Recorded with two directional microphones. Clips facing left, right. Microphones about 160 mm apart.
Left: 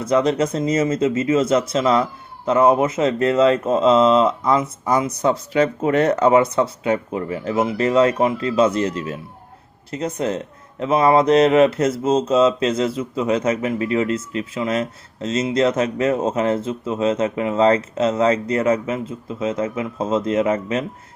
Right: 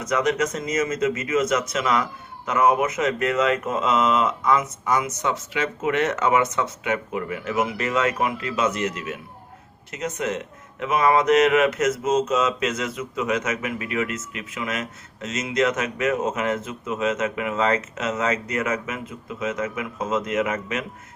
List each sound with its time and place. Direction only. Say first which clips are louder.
0.0 s speech: left 5 dB; 30° left (ahead or behind)